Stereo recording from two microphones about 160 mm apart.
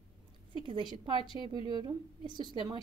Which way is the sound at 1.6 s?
30° right (ahead or behind).